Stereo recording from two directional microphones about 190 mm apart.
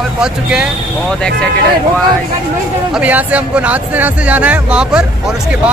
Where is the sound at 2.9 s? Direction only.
10° right (ahead or behind).